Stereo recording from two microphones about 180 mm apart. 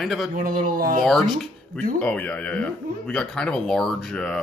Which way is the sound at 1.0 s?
5° left (ahead or behind).